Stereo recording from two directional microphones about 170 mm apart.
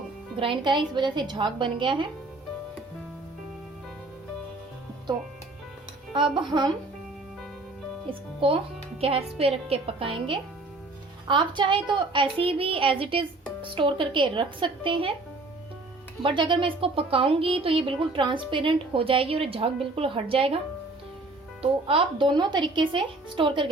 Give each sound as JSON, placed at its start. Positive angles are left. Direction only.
{"t": 0.3, "sound": "speech", "side_deg": -30}
{"t": 6.1, "sound": "speech", "side_deg": -30}
{"t": 8.4, "sound": "a woman's voice", "side_deg": -30}
{"t": 16.2, "sound": "a woman's voice", "side_deg": -25}
{"t": 21.6, "sound": "speech", "side_deg": -35}